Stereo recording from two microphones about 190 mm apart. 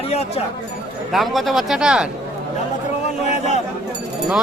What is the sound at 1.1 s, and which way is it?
Speech, centre (ahead or behind).